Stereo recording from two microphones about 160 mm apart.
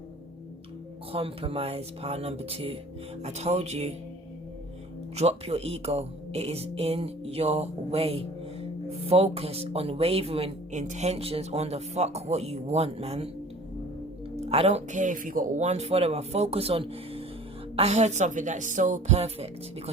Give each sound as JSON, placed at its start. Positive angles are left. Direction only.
{"t": 1.1, "sound": "speech", "side_deg": -35}
{"t": 5.1, "sound": "speech", "side_deg": -40}
{"t": 14.3, "sound": "speech", "side_deg": -40}